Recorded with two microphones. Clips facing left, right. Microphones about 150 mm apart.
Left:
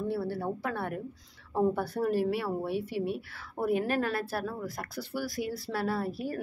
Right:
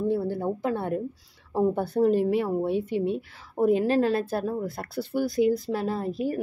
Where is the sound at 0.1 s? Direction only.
20° right (ahead or behind).